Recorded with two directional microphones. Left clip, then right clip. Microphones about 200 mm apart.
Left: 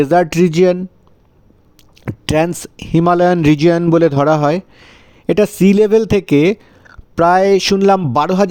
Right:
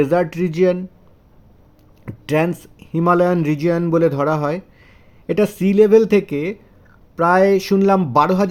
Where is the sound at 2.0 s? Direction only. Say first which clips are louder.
Left 4 dB; 45° left (ahead or behind).